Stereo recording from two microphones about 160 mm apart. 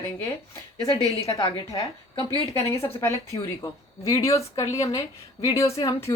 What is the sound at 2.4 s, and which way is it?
A woman's voice, 20° left (ahead or behind).